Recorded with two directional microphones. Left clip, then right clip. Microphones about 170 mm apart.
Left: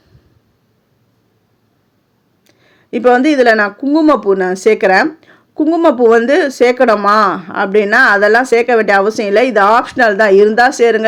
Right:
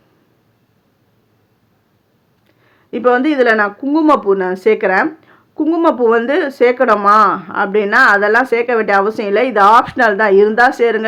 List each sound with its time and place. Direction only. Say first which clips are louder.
2.5 s speech: left 4 dB; 25° left (ahead or behind)